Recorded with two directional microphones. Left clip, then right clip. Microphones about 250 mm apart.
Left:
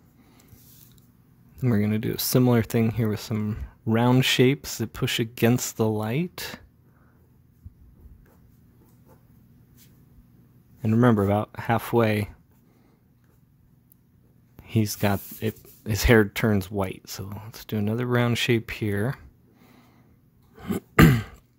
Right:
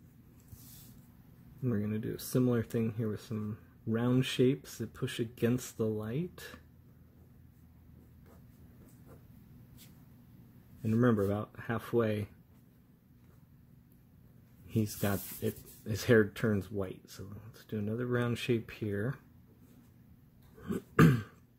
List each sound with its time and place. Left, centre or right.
1.6 s speech: left
10.8 s speech: left
14.7 s speech: left
20.6 s throat clearing: left